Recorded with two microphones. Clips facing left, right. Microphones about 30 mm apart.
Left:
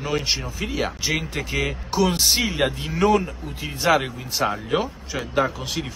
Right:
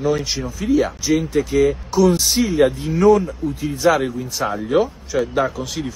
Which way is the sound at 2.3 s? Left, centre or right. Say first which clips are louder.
Right 5 dB; left.